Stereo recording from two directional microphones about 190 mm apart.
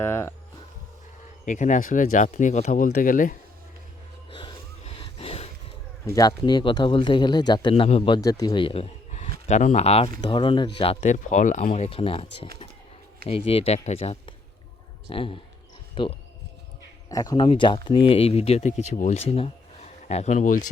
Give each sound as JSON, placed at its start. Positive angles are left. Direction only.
{"t": 0.0, "sound": "speech", "side_deg": 15}
{"t": 1.5, "sound": "speech", "side_deg": 40}
{"t": 4.3, "sound": "gasp", "side_deg": 25}
{"t": 6.1, "sound": "speech", "side_deg": 20}
{"t": 11.7, "sound": "speech", "side_deg": 30}